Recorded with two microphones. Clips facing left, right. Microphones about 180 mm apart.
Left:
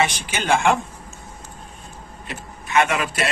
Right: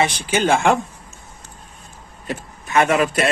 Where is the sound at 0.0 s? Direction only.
35° right (ahead or behind).